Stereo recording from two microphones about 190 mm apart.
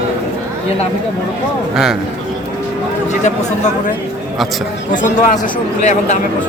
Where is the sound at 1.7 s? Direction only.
Centre (ahead or behind).